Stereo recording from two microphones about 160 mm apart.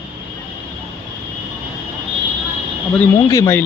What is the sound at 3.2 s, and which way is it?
Speech, 20° left (ahead or behind).